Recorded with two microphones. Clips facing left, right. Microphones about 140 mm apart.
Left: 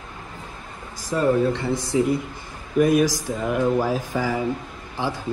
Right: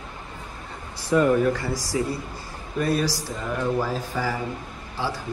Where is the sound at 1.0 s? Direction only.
35° left (ahead or behind).